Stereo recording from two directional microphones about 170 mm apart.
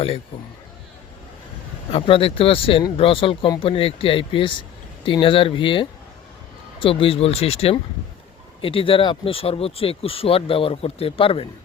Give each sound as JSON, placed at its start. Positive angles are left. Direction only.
{"t": 1.9, "sound": "speech", "side_deg": 35}